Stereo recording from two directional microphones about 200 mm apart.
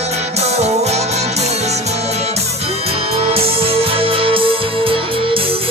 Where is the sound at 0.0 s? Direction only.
35° right (ahead or behind).